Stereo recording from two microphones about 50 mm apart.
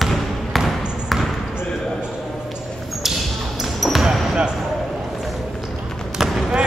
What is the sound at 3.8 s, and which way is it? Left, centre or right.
Basketball bounce, centre.